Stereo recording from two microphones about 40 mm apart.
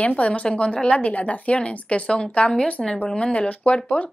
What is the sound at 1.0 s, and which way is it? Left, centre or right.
A woman's voice, left.